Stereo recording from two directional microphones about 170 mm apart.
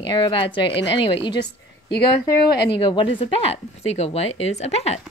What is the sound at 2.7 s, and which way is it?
Speech, 30° left (ahead or behind).